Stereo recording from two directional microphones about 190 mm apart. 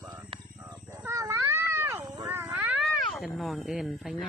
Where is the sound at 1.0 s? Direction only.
15° right (ahead or behind).